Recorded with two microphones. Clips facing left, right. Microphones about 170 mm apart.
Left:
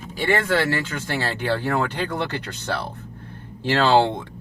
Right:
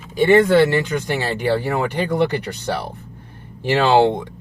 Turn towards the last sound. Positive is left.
turn(degrees=-15)  # may be behind; listen again after turning